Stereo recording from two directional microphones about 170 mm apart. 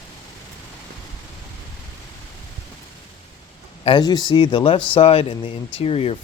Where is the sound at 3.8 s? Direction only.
25° left (ahead or behind).